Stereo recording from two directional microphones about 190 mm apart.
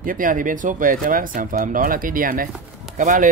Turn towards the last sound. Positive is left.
turn(degrees=-45)  # may be behind; listen again after turning